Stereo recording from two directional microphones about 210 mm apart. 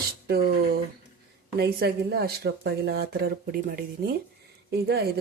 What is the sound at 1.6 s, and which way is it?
Speech, 50° right (ahead or behind).